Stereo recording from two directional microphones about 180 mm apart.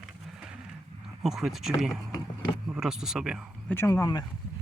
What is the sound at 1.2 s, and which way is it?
Speech, centre (ahead or behind).